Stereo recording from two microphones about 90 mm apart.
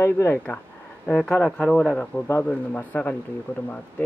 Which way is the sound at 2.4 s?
15° left (ahead or behind).